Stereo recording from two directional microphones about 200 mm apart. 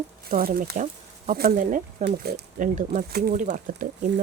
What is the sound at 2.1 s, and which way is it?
Speech, 55° right (ahead or behind).